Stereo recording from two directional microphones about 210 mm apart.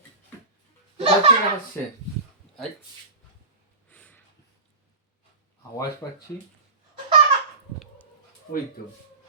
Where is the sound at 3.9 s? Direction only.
5° left (ahead or behind).